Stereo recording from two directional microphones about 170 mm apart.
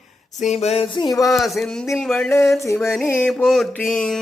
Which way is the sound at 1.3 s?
Centre (ahead or behind).